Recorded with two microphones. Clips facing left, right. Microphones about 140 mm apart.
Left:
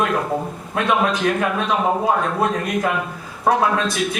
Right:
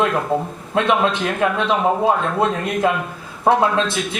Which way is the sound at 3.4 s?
25° right (ahead or behind).